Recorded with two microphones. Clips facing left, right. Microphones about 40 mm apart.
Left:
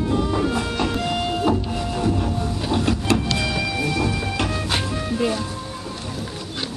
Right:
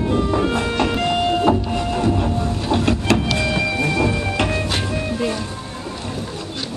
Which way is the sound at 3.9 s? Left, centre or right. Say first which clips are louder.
Right 4 dB; centre.